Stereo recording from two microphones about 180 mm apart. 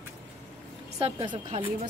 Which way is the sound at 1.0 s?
25° right (ahead or behind).